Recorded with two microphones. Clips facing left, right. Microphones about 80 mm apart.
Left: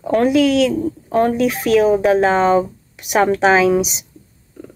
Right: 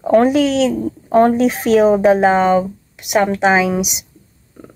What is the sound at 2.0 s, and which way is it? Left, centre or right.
Speech, centre.